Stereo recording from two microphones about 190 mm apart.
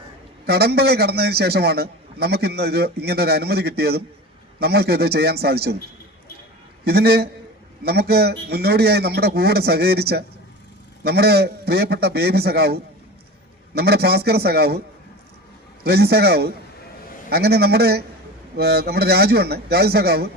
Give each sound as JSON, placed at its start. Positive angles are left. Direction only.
{"t": 0.4, "sound": "a man's voice", "side_deg": -55}
{"t": 6.8, "sound": "a man's voice", "side_deg": -55}
{"t": 15.8, "sound": "a man's voice", "side_deg": -55}